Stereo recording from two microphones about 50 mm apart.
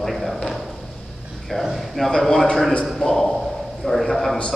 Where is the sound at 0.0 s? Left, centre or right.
Centre.